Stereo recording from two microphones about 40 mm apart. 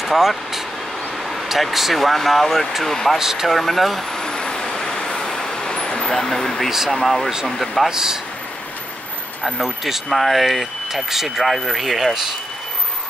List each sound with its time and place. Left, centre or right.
0.0 s speech: centre
3.2 s speech: centre
3.4 s speech: centre
4.2 s vehicle: centre
6.0 s speech: centre
7.9 s speech: centre
9.4 s speech: centre